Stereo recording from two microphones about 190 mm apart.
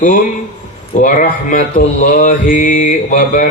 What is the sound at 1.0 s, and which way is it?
Speech, 45° left (ahead or behind).